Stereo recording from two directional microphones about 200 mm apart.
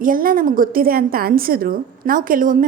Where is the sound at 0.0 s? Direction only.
45° right (ahead or behind).